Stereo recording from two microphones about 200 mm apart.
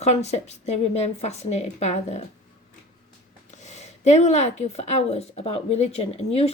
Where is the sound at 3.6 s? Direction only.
35° left (ahead or behind).